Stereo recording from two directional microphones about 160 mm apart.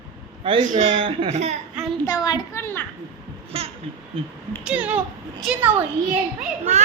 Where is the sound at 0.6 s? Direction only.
50° right (ahead or behind).